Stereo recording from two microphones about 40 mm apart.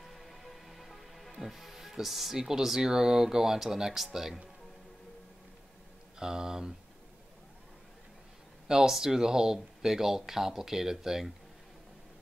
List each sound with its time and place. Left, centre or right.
0.0 s music: centre
1.4 s speech: centre
6.1 s speech: centre
8.6 s speech: centre